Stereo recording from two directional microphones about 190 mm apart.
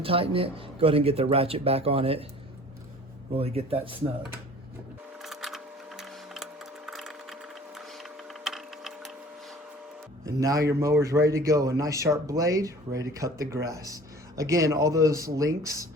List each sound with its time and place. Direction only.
0.0 s speech: 30° right (ahead or behind)
3.3 s speech: 30° right (ahead or behind)
5.2 s a sound: centre (ahead or behind)
10.2 s a man's voice: 20° right (ahead or behind)